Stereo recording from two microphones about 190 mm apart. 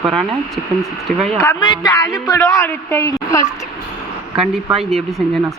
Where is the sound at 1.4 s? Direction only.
20° left (ahead or behind).